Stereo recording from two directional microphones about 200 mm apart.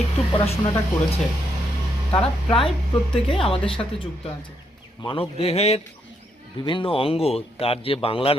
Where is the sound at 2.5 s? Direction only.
25° left (ahead or behind).